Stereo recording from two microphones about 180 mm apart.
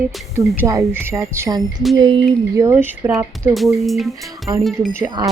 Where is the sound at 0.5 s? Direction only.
15° right (ahead or behind).